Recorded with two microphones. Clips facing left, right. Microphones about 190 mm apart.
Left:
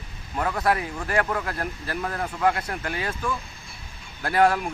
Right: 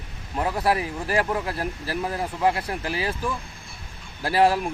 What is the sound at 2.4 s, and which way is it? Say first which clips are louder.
Speech: even; 30° right (ahead or behind).